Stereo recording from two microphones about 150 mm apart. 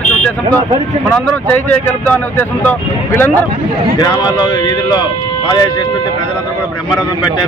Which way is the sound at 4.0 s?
30° left (ahead or behind).